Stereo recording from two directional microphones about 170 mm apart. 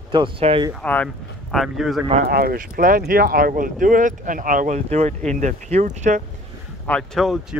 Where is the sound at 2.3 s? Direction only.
60° right (ahead or behind); by 6.2 s 45° right (ahead or behind).